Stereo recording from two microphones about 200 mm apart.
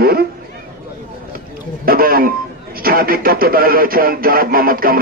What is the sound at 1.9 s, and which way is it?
Speech, 45° right (ahead or behind).